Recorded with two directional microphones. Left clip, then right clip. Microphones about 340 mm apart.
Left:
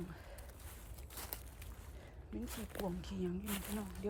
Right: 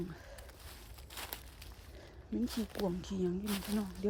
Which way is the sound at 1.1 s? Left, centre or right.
Centre.